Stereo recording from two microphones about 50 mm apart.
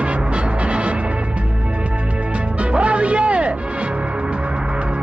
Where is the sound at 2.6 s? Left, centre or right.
Right.